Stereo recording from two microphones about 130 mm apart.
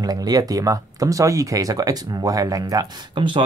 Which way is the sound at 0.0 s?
30° right (ahead or behind).